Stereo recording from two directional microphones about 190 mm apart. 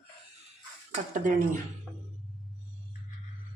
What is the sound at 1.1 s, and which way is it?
Speech, 40° right (ahead or behind).